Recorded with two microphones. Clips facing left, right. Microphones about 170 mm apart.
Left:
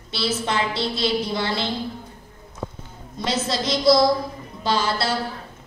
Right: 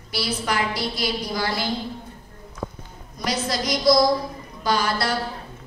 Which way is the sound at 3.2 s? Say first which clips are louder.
Left 1 dB; 25° left (ahead or behind).